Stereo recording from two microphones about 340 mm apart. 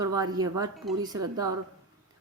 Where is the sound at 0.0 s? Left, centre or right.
Centre.